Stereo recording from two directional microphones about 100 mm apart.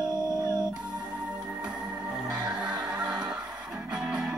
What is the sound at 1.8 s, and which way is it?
Music, 20° right (ahead or behind).